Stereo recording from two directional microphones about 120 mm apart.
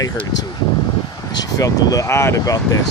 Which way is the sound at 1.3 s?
30° left (ahead or behind).